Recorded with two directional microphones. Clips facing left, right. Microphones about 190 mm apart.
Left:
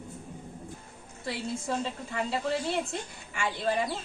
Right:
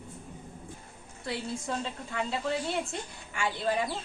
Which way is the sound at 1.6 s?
Centre (ahead or behind).